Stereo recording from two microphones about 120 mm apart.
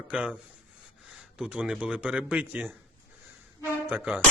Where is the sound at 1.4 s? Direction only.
10° right (ahead or behind).